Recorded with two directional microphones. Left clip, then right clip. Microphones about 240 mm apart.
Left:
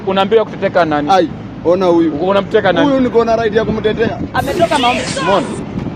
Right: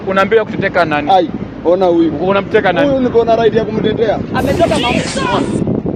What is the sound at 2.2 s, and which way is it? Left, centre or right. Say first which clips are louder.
Speech: even; centre.